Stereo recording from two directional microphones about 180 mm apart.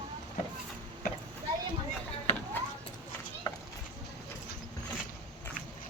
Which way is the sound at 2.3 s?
40° left (ahead or behind).